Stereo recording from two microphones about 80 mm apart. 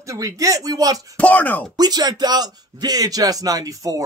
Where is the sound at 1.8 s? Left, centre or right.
Right.